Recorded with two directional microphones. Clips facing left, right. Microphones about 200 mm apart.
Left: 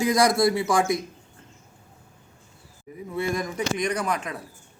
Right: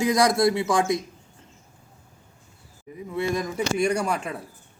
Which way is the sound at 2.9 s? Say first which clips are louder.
Right 1 dB; 20° right (ahead or behind).